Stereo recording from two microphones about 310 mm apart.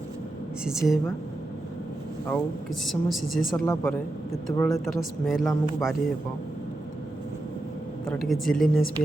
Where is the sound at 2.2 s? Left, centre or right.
Centre.